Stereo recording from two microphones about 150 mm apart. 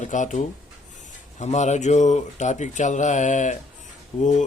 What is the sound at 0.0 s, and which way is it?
Speech, 55° left (ahead or behind).